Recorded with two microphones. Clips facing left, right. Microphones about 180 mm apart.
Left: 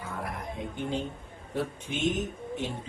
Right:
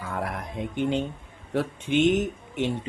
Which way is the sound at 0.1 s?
75° right (ahead or behind).